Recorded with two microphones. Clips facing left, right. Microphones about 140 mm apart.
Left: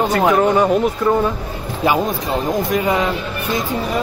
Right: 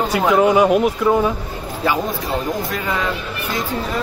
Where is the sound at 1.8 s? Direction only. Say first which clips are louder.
Left 3 dB; 15° left (ahead or behind).